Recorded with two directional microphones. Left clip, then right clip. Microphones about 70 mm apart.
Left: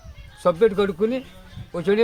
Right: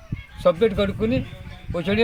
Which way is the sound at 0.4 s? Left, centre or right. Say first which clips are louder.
Left 1 dB; left.